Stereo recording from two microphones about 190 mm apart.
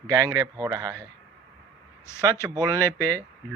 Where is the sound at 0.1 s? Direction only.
20° right (ahead or behind).